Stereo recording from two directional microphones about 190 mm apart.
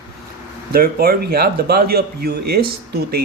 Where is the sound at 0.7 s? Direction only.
55° right (ahead or behind).